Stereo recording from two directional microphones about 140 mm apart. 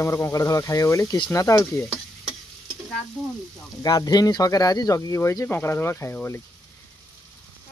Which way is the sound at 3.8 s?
25° left (ahead or behind).